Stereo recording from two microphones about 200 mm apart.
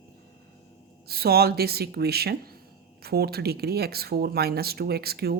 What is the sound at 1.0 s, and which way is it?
Speech, 50° right (ahead or behind).